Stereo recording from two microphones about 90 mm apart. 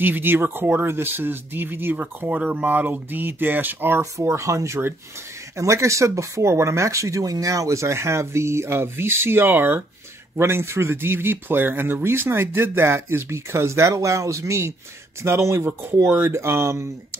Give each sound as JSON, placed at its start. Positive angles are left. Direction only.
{"t": 0.0, "sound": "speech", "side_deg": -20}
{"t": 4.0, "sound": "speech", "side_deg": -35}